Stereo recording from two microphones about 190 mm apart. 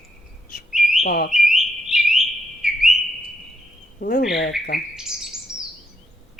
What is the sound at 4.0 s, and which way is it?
Speech, 50° left (ahead or behind).